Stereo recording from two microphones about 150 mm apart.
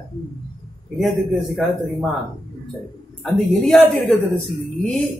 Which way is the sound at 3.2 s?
Centre (ahead or behind).